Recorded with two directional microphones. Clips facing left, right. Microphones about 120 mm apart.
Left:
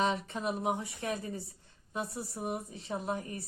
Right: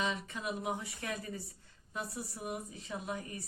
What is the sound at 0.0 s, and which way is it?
A woman's voice, 30° left (ahead or behind).